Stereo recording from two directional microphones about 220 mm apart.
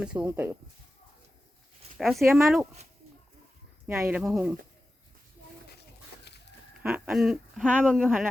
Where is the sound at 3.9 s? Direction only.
10° right (ahead or behind).